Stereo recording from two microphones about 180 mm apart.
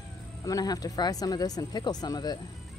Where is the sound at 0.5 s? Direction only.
20° left (ahead or behind).